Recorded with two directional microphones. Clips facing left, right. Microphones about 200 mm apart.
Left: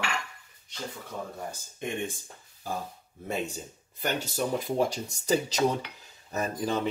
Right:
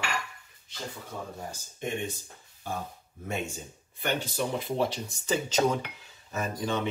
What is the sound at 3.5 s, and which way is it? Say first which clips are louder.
Speech: left 1 dB; 40° left (ahead or behind).